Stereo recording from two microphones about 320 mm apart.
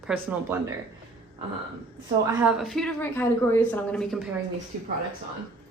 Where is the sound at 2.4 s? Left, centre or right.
Centre.